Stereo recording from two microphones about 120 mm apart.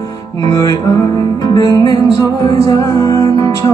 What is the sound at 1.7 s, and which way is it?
Music, 30° left (ahead or behind).